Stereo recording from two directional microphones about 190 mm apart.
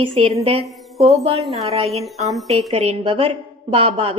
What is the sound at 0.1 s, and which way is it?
Speech, 30° right (ahead or behind).